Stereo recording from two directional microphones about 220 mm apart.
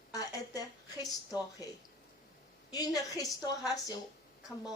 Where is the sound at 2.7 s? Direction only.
15° left (ahead or behind).